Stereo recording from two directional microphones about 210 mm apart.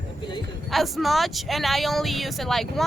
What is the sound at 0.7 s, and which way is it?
Speech, centre (ahead or behind).